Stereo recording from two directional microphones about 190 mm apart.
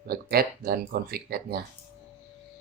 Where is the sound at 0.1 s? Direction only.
55° right (ahead or behind).